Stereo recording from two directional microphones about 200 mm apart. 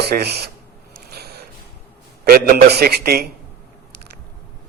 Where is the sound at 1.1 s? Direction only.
50° right (ahead or behind).